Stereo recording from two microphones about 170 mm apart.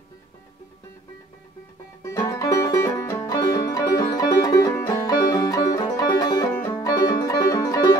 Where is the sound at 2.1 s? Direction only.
20° left (ahead or behind).